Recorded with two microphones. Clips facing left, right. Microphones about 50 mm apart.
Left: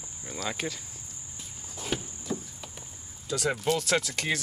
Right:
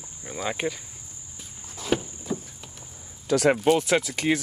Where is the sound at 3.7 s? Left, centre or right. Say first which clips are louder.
Right 5 dB; centre.